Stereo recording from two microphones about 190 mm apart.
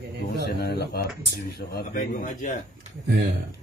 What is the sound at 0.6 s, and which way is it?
Speech, 60° left (ahead or behind).